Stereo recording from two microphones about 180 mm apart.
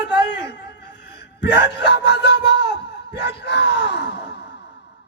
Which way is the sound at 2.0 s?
70° left (ahead or behind).